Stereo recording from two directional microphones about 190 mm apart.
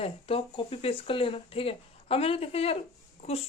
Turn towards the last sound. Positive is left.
turn(degrees=35)  # may be behind; listen again after turning